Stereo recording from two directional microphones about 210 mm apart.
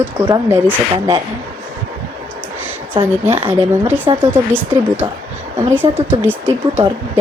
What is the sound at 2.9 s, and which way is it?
Speech, 10° right (ahead or behind).